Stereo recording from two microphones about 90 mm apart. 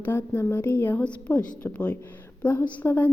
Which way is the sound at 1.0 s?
15° left (ahead or behind).